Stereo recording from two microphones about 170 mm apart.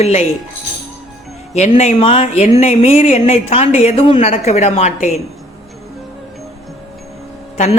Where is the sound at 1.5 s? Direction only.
45° left (ahead or behind).